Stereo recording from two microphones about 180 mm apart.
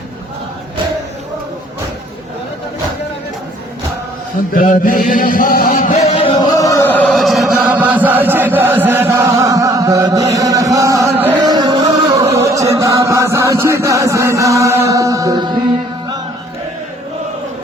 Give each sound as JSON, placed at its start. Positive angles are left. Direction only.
{"t": 4.5, "sound": "chant", "side_deg": 50}
{"t": 5.7, "sound": "music", "side_deg": 40}
{"t": 6.1, "sound": "music", "side_deg": 30}
{"t": 6.6, "sound": "chant", "side_deg": 15}
{"t": 11.2, "sound": "music", "side_deg": -15}